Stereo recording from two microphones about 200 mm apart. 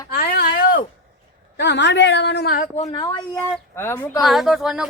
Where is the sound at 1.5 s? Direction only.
60° left (ahead or behind); by 2.9 s 40° left (ahead or behind).